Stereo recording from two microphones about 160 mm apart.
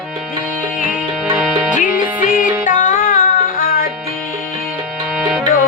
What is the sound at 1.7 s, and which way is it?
Music, 55° left (ahead or behind).